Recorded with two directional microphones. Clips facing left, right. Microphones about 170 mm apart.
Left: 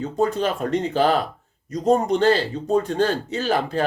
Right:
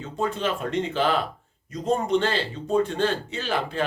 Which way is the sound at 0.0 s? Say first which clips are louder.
Left 5 dB; 40° left (ahead or behind).